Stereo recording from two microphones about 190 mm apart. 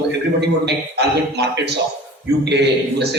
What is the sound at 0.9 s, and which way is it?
A man's voice, 60° right (ahead or behind).